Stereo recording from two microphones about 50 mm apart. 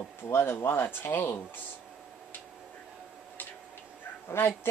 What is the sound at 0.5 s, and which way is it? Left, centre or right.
Speech, left.